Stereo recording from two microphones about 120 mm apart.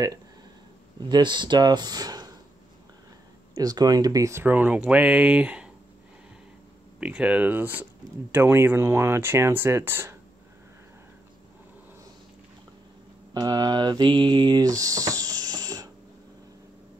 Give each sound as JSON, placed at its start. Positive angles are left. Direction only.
{"t": 0.9, "sound": "speech", "side_deg": -35}
{"t": 3.5, "sound": "speech", "side_deg": -30}
{"t": 7.0, "sound": "speech", "side_deg": -10}
{"t": 13.3, "sound": "mantra", "side_deg": -35}